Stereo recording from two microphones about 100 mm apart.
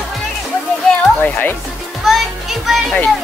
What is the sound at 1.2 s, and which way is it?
Music, 15° left (ahead or behind).